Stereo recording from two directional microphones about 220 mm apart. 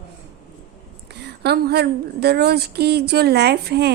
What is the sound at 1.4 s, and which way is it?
Speech, 45° right (ahead or behind).